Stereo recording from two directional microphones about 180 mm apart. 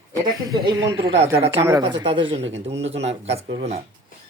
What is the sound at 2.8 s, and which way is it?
Speech, 35° right (ahead or behind).